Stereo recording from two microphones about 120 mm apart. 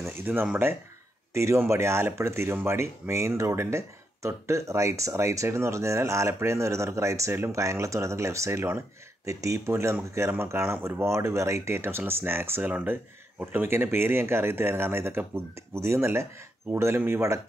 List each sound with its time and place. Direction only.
0.0 s speech: 15° right (ahead or behind)